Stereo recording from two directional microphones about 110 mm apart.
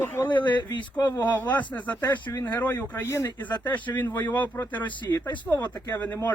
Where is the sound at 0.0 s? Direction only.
20° left (ahead or behind).